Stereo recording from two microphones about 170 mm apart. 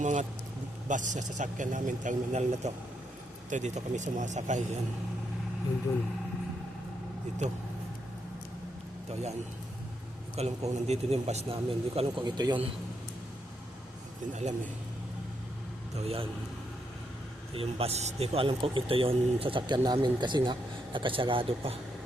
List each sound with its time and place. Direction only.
0.0 s speech: 45° right (ahead or behind)
10.3 s speech: 40° right (ahead or behind)
14.3 s speech: 40° right (ahead or behind)
16.0 s speech: 35° right (ahead or behind)
17.5 s speech: 35° right (ahead or behind)